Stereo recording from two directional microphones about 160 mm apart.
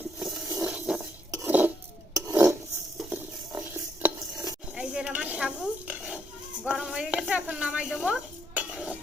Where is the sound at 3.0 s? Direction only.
5° right (ahead or behind).